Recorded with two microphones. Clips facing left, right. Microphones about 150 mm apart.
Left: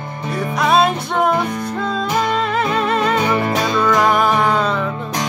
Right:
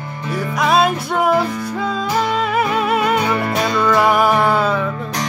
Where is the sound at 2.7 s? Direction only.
5° right (ahead or behind).